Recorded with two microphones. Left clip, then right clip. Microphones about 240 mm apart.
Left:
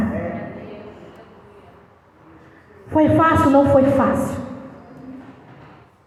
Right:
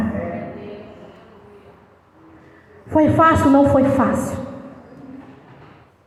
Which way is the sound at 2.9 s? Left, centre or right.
Right.